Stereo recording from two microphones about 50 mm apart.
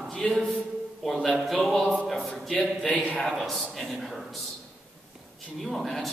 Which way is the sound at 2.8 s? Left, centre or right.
Centre.